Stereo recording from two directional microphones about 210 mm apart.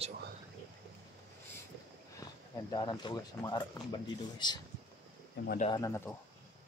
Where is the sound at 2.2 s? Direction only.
20° left (ahead or behind).